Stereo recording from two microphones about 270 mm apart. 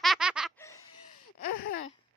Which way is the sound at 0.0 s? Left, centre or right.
Centre.